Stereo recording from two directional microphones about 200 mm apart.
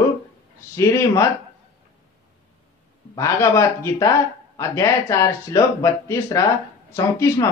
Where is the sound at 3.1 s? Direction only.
15° left (ahead or behind).